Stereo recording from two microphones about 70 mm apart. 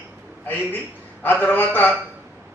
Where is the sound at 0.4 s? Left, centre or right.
Left.